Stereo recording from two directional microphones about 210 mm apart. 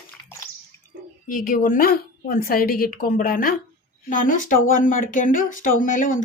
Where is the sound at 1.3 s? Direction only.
40° left (ahead or behind).